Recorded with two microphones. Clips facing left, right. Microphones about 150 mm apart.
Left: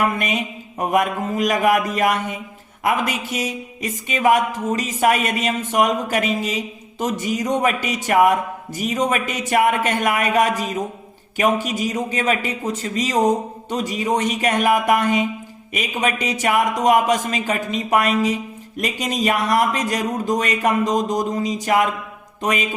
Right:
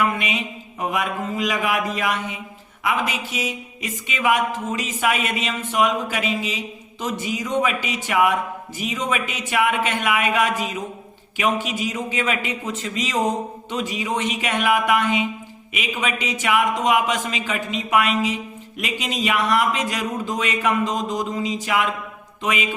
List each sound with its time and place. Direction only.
0.0 s a man's voice: 45° left (ahead or behind)